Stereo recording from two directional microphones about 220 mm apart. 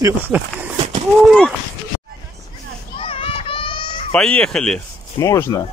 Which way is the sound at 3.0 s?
25° left (ahead or behind).